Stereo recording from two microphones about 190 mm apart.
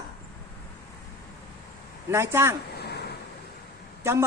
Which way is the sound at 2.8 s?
60° left (ahead or behind).